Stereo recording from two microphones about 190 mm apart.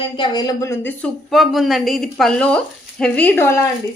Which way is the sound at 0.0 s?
25° left (ahead or behind).